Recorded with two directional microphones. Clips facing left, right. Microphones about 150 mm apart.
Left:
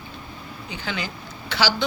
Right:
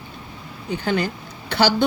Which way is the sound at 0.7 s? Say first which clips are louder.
Right 9 dB; 55° right (ahead or behind).